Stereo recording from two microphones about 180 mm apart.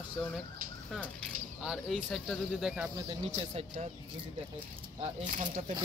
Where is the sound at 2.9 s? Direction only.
35° right (ahead or behind).